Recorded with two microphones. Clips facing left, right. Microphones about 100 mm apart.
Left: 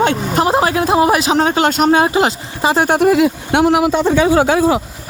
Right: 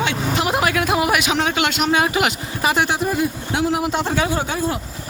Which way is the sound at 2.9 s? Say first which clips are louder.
Left 9 dB; 70° left (ahead or behind).